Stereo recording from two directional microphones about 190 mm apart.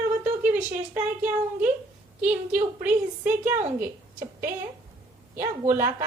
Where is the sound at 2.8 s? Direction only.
10° right (ahead or behind).